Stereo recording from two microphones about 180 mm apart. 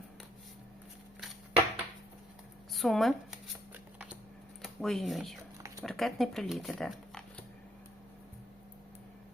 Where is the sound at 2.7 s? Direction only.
Centre (ahead or behind).